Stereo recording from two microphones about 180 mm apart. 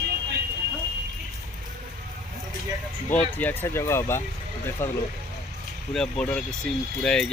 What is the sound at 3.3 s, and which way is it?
Speech, 10° left (ahead or behind).